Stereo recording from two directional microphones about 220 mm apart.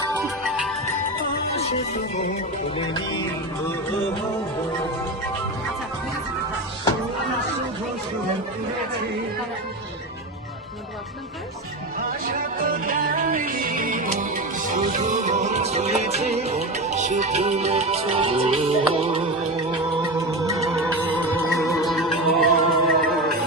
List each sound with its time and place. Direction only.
0.4 s music: centre (ahead or behind)
2.7 s music: 20° left (ahead or behind)
12.2 s music: 40° right (ahead or behind)
21.7 s music: centre (ahead or behind)